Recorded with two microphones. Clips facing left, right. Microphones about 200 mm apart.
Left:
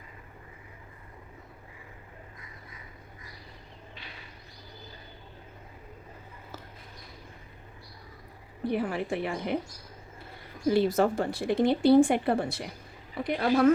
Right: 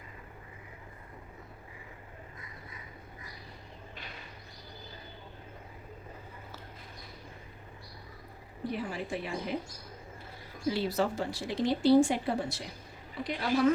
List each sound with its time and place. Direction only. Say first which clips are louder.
8.7 s speech: left 6 dB; 60° left (ahead or behind)
10.7 s speech: left 6 dB; 50° left (ahead or behind)